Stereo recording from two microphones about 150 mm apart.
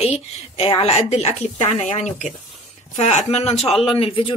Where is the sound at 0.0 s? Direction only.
40° left (ahead or behind).